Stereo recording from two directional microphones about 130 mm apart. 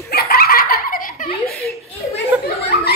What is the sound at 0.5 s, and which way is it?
Laughter, 90° left.